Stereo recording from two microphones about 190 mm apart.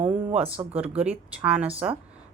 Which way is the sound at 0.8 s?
5° right (ahead or behind).